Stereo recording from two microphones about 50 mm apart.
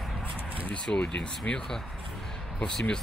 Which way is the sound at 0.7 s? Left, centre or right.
Left.